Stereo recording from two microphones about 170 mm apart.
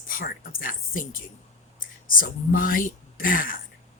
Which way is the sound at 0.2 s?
55° left (ahead or behind).